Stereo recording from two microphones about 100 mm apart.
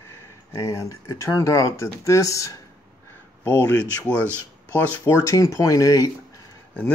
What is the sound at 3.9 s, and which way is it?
Speech, 10° left (ahead or behind).